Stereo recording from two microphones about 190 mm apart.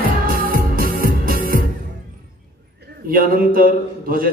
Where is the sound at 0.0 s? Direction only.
50° right (ahead or behind).